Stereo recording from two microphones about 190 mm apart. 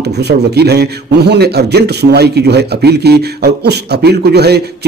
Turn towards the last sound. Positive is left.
turn(degrees=-60)  # may be behind; listen again after turning